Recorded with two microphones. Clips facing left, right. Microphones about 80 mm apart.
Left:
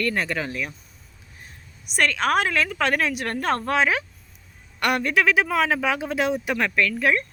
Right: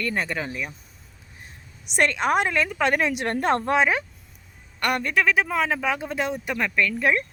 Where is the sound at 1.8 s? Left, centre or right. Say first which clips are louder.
Even; right.